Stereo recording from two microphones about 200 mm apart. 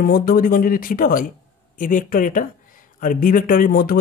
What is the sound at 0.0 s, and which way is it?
Speech, 50° left (ahead or behind).